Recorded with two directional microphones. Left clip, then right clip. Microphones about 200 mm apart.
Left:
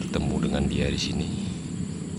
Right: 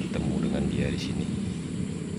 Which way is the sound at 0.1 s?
25° left (ahead or behind).